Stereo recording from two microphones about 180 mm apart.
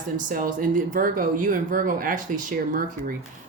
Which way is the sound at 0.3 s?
50° right (ahead or behind).